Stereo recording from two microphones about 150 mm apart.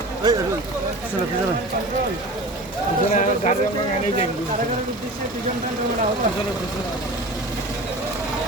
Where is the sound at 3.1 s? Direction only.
50° left (ahead or behind).